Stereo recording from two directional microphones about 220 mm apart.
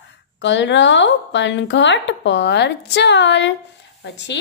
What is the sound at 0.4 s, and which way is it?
A woman's voice, 55° left (ahead or behind).